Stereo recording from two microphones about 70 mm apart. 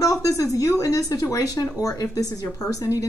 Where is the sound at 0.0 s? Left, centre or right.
Left.